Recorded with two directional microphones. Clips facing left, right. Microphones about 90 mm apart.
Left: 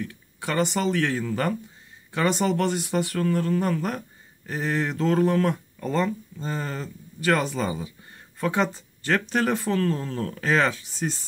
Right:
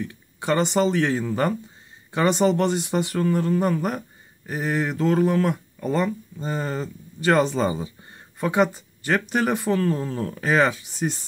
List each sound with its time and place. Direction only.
0.0 s speech: 25° right (ahead or behind)
8.4 s speech: 15° right (ahead or behind)